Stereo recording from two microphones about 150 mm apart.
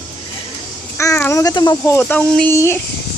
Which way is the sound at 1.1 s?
20° left (ahead or behind).